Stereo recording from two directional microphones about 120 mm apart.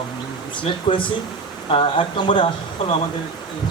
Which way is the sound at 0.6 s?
45° left (ahead or behind).